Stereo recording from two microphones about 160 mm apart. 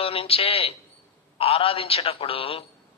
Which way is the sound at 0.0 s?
35° left (ahead or behind).